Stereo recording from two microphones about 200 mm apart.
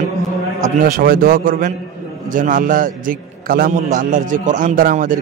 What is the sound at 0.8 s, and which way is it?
A man's voice, 45° right (ahead or behind).